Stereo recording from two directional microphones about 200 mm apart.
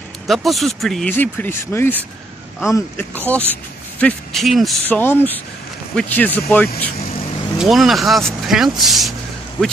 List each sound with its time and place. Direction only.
0.3 s speech: centre (ahead or behind)